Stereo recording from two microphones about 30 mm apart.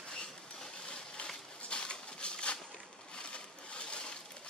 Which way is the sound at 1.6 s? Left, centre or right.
Left.